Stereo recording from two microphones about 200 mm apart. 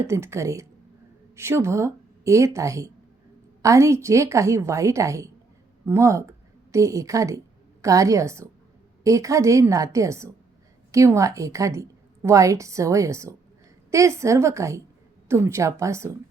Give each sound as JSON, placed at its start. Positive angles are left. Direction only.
{"t": 0.0, "sound": "a woman's voice", "side_deg": -15}